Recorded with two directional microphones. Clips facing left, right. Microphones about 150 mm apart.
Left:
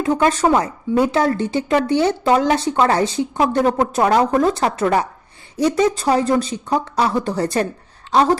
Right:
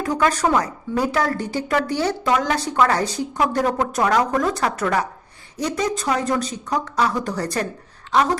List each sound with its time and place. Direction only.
0.0 s a woman's voice: 25° left (ahead or behind)